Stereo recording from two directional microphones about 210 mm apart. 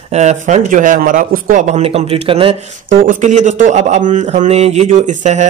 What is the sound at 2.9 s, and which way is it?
Speech, 40° right (ahead or behind).